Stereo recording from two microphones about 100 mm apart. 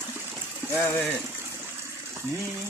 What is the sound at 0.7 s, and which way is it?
Speech, 25° left (ahead or behind).